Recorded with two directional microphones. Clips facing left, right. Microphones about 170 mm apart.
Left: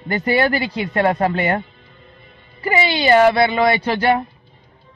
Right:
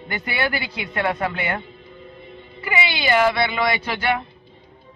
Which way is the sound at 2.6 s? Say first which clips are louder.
Left 6 dB; 40° left (ahead or behind).